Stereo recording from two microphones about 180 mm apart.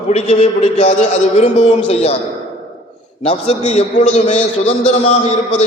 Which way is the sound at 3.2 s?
35° left (ahead or behind).